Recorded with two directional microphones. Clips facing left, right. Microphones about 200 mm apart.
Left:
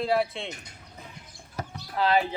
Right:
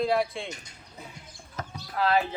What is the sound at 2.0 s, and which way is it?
Speech, 25° left (ahead or behind).